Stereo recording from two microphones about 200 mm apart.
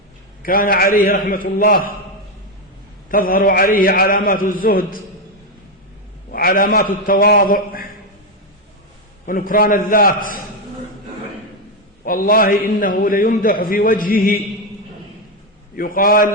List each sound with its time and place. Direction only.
0.4 s a man's voice: 45° left (ahead or behind)
3.1 s a man's voice: 45° left (ahead or behind)
6.3 s a man's voice: 45° left (ahead or behind)
9.2 s a man's voice: 45° left (ahead or behind)
12.0 s a man's voice: 45° left (ahead or behind)
15.7 s a man's voice: 45° left (ahead or behind)